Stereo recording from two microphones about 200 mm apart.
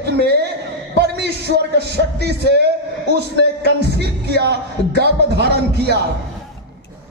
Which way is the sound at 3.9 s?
55° right (ahead or behind).